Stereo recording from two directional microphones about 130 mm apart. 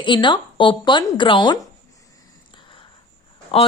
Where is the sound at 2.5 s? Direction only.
40° left (ahead or behind).